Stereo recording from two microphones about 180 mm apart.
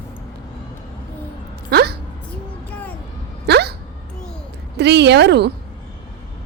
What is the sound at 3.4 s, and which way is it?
Dog, 65° right (ahead or behind).